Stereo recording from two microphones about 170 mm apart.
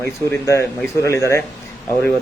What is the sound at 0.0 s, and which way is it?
A man's voice, 15° left (ahead or behind).